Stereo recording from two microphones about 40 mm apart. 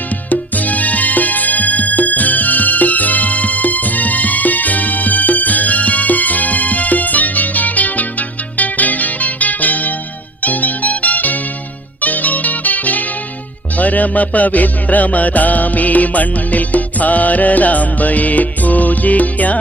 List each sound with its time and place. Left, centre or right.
0.3 s music: left